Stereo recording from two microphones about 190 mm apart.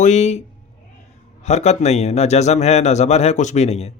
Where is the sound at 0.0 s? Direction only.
35° left (ahead or behind).